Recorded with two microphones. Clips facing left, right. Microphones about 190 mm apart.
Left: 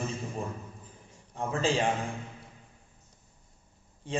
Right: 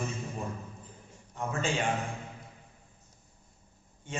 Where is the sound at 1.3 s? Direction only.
35° left (ahead or behind).